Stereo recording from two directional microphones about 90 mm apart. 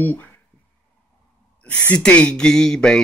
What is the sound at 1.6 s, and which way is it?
Speech, 15° left (ahead or behind).